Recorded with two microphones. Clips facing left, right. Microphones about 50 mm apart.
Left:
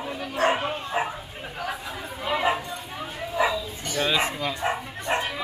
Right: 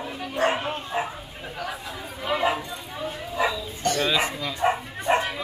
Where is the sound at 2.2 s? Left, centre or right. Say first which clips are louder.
Even; centre.